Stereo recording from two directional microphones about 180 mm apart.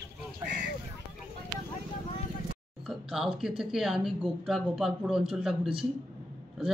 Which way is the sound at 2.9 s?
Centre (ahead or behind).